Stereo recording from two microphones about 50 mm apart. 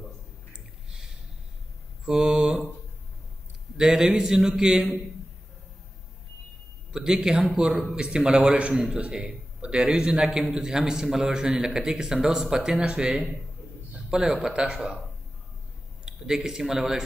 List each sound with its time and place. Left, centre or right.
0.5 s a sound: centre
2.0 s a man's voice: centre
3.7 s a man's voice: centre
6.9 s a man's voice: centre
7.9 s a man's voice: centre
16.1 s a man's voice: centre